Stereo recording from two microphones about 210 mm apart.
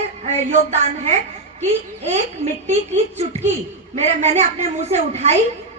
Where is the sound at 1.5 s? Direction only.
30° right (ahead or behind).